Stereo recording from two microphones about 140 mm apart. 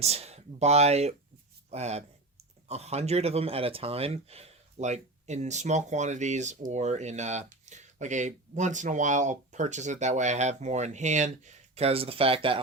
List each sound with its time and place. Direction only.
0.0 s speech: 50° right (ahead or behind)